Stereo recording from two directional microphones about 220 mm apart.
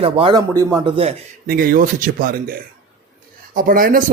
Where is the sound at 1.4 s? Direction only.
40° right (ahead or behind).